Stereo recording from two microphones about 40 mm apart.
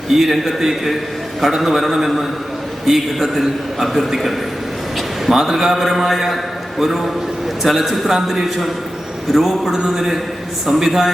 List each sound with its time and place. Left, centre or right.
0.1 s a man's voice: centre
9.7 s a man's voice: centre